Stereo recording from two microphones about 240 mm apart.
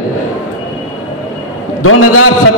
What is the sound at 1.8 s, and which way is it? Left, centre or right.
Speech, left.